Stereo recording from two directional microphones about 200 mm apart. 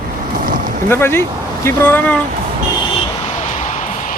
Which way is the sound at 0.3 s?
45° right (ahead or behind).